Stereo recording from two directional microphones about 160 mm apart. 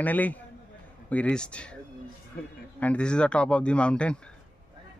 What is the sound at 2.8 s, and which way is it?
A man's voice, 5° left (ahead or behind).